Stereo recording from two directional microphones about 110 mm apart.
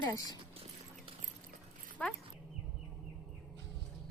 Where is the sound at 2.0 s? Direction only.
10° left (ahead or behind).